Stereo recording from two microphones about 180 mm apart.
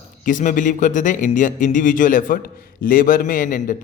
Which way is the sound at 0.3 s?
45° left (ahead or behind).